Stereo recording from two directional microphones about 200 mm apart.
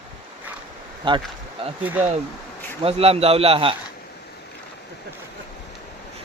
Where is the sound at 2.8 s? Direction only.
30° right (ahead or behind).